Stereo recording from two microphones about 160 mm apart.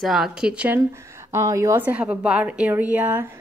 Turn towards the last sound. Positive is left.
turn(degrees=-10)  # may be behind; listen again after turning